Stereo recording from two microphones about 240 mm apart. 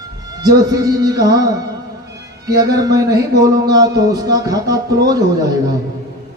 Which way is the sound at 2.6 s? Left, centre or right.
Centre.